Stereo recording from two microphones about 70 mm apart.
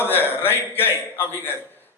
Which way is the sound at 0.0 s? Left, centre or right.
Left.